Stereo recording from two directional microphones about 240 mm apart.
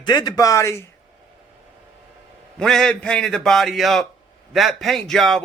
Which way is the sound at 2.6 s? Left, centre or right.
Centre.